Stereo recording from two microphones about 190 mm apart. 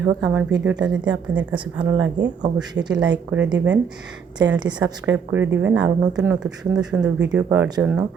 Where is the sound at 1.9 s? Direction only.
90° right.